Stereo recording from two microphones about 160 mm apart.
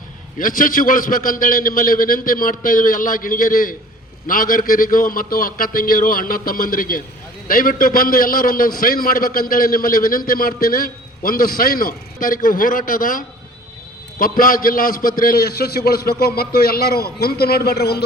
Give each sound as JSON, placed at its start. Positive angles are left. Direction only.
{"t": 0.3, "sound": "a man's voice", "side_deg": 60}